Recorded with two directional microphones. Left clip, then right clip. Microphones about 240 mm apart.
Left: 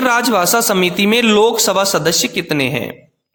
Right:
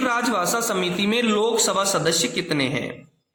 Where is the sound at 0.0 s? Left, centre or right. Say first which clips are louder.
Left 8 dB; left.